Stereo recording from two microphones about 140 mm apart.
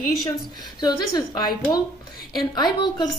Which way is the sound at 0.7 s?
30° left (ahead or behind).